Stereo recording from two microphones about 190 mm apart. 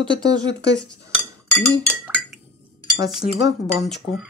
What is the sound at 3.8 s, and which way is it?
Speech, centre (ahead or behind).